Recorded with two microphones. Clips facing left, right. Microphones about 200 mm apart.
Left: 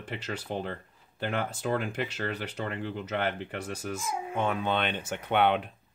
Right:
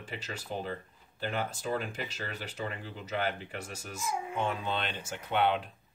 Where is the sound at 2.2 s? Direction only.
55° left (ahead or behind).